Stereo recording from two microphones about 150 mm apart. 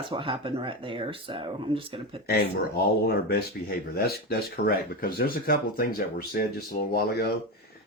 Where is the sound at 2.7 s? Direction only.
90° left.